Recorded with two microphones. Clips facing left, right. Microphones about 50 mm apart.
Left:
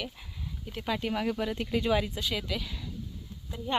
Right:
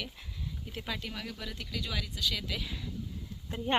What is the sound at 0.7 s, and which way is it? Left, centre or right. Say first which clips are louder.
Speech: left 6 dB; centre.